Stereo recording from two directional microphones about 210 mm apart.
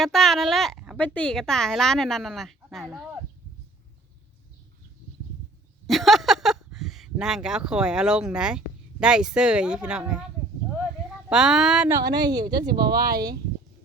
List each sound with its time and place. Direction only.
0.0 s speech: centre (ahead or behind)
5.9 s speech: centre (ahead or behind)
11.3 s speech: 5° right (ahead or behind)
11.9 s speech: 20° right (ahead or behind)
12.9 s speech: 45° right (ahead or behind)